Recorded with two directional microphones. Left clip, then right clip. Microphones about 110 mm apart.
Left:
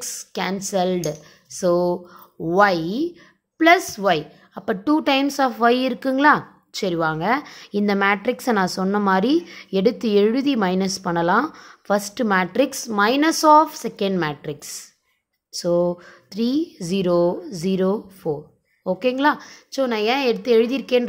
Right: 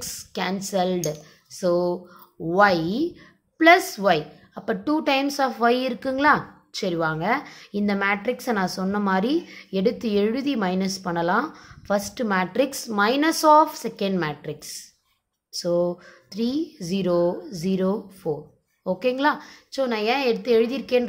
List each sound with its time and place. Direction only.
0.0 s a woman's voice: 30° left (ahead or behind)